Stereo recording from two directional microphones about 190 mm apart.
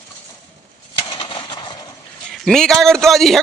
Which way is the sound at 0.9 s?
25° left (ahead or behind).